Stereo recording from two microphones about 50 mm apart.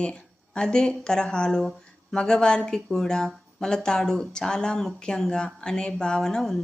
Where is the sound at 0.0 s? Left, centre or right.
Centre.